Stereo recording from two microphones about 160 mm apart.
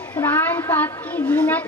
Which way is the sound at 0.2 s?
15° left (ahead or behind).